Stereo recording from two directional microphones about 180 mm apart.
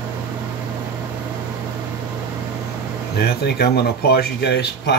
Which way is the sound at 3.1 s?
60° left (ahead or behind).